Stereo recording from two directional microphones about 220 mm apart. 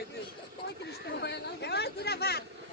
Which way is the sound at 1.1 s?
50° left (ahead or behind).